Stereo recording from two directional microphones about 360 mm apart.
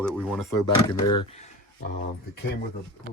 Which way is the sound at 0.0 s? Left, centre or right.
Centre.